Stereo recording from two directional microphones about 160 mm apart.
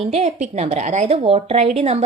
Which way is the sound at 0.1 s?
40° right (ahead or behind).